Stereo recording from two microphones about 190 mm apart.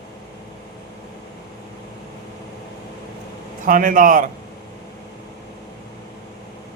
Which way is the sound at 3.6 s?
45° right (ahead or behind).